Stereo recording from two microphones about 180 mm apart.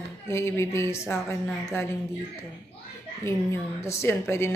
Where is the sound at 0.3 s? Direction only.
15° left (ahead or behind).